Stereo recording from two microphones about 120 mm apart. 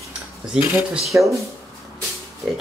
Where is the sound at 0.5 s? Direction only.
5° right (ahead or behind).